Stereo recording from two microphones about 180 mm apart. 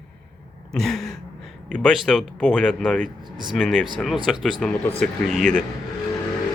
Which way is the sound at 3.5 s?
5° left (ahead or behind).